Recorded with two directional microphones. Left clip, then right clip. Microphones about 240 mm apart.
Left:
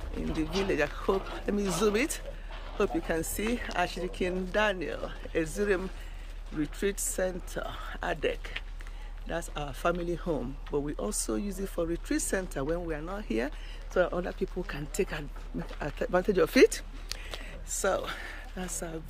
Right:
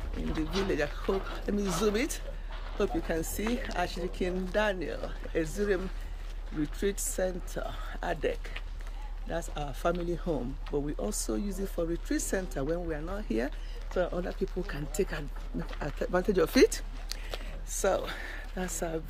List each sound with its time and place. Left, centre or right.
0.7 s speech: centre
1.1 s speech: left
1.4 s speech: centre